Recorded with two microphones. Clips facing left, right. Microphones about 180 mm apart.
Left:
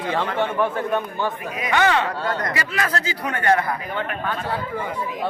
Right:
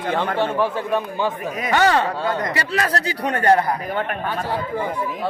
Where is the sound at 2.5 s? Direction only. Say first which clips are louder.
Right 2 dB; 35° right (ahead or behind).